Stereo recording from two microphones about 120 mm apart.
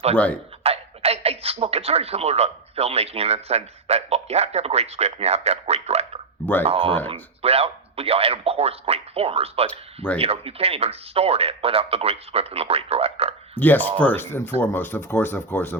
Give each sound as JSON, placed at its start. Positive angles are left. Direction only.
{"t": 0.6, "sound": "speech", "side_deg": -60}
{"t": 6.4, "sound": "speech", "side_deg": 15}
{"t": 6.7, "sound": "speech", "side_deg": -45}
{"t": 7.1, "sound": "speech", "side_deg": -55}
{"t": 9.6, "sound": "speech", "side_deg": 10}
{"t": 10.2, "sound": "speech", "side_deg": -55}
{"t": 13.6, "sound": "speech", "side_deg": 15}